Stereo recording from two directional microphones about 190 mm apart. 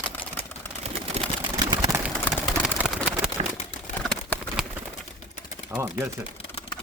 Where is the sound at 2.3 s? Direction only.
5° right (ahead or behind).